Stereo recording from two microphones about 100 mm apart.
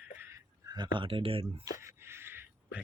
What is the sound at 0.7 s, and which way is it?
Speech, 50° right (ahead or behind).